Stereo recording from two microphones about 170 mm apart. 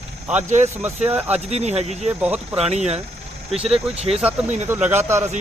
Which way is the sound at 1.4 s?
40° right (ahead or behind).